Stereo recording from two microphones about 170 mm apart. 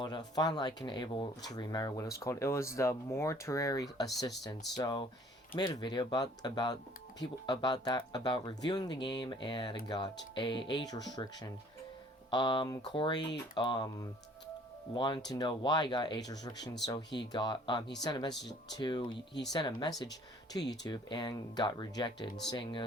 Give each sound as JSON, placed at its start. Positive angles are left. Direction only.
{"t": 0.0, "sound": "speech", "side_deg": 25}
{"t": 20.5, "sound": "speech", "side_deg": 20}